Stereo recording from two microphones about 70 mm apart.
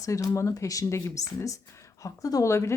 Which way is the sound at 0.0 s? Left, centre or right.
Left.